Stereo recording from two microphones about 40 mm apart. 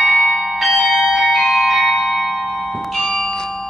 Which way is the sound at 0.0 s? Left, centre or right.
Centre.